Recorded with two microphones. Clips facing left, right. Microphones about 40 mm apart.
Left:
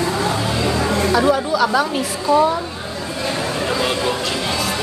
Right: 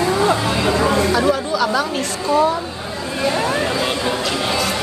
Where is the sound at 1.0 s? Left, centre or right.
Centre.